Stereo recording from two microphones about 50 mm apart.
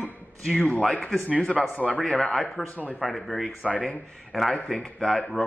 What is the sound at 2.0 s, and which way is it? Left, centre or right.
Speech, centre.